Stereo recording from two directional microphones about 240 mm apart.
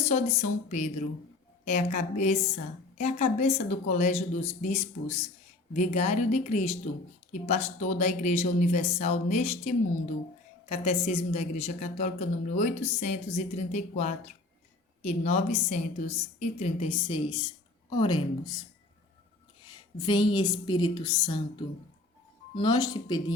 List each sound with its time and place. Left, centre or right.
0.0 s a woman's voice: left
20.0 s a woman's voice: centre